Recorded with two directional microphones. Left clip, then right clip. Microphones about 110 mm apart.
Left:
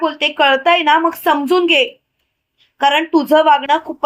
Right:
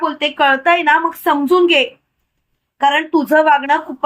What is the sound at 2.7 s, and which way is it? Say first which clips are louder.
Speech: even; 85° left.